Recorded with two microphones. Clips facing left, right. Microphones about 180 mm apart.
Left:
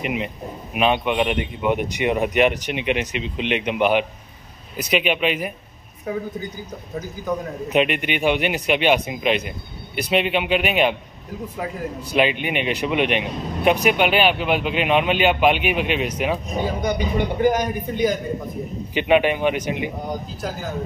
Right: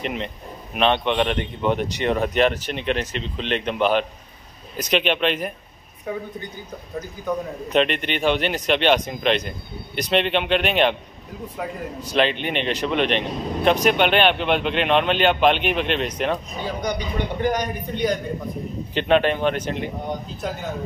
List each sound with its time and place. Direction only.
0.0 s a man's voice: 5° left (ahead or behind)
17.4 s a man's voice: 5° left (ahead or behind)